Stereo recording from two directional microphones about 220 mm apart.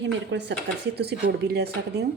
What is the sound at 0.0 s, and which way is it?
A woman's voice, 50° right (ahead or behind).